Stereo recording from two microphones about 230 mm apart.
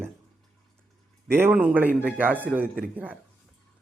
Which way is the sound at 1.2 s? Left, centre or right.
Centre.